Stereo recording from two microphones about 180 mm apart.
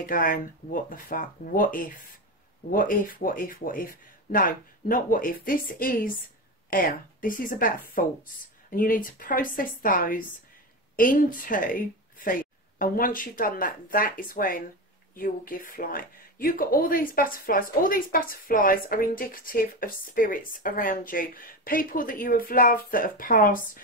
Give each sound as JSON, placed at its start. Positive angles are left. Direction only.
{"t": 0.0, "sound": "speech", "side_deg": 50}